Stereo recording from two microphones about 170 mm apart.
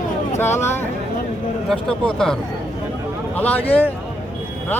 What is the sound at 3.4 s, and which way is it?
Speech, 10° left (ahead or behind).